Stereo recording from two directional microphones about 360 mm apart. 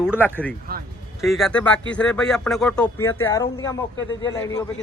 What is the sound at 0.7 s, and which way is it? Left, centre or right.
Music, right.